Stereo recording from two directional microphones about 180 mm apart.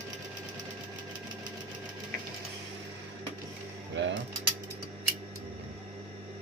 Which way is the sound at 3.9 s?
80° right.